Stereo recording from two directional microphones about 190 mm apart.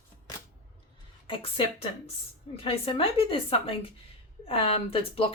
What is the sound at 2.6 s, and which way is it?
Speech, 30° left (ahead or behind).